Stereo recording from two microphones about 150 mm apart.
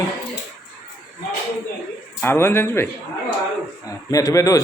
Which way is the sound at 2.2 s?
15° left (ahead or behind).